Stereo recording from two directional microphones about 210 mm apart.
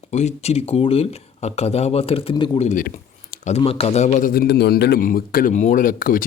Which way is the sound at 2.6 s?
35° left (ahead or behind).